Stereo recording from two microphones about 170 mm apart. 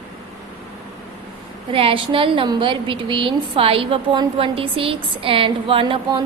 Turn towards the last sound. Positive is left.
turn(degrees=-30)  # may be behind; listen again after turning